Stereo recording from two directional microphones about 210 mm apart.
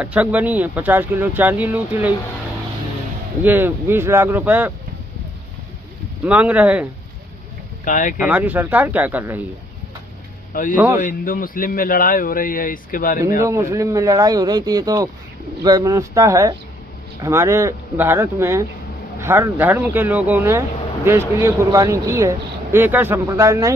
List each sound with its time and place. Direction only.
0.0 s speech: 5° right (ahead or behind)
3.4 s speech: 10° right (ahead or behind)
6.2 s speech: 5° right (ahead or behind)
7.8 s speech: 40° left (ahead or behind)
8.2 s speech: 5° right (ahead or behind)
10.5 s a man's voice: 40° left (ahead or behind)
13.4 s speech: 15° right (ahead or behind)